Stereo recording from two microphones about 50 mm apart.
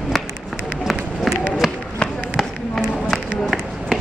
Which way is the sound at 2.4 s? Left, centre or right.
Centre.